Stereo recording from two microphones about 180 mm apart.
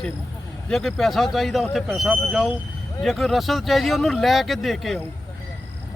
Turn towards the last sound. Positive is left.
turn(degrees=0)  # may be behind; listen again after turning